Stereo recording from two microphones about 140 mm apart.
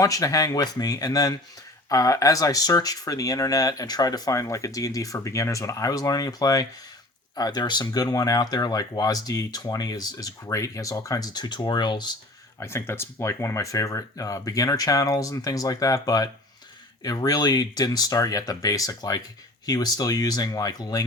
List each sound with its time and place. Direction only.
0.0 s speech: 25° left (ahead or behind)
12.5 s speech: 20° left (ahead or behind)